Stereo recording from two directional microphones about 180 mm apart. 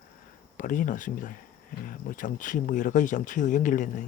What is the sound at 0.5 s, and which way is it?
Speech, 45° left (ahead or behind).